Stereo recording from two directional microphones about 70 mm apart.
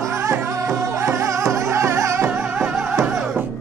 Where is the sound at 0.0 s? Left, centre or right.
Right.